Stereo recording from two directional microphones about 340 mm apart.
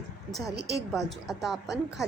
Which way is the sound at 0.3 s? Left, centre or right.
Centre.